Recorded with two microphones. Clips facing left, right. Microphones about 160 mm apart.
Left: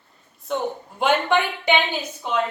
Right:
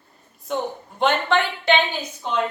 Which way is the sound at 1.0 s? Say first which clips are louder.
Even; 10° left (ahead or behind).